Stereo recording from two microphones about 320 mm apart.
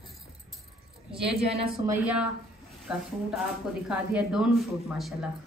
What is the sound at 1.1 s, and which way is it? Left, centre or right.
Speech, centre.